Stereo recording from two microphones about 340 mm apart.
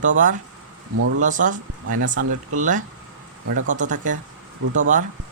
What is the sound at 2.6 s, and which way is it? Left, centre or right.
Speech, right.